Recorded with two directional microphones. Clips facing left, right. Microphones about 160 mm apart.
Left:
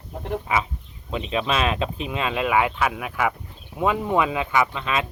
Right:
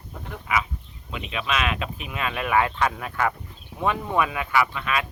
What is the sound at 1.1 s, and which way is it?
Speech, 30° left (ahead or behind).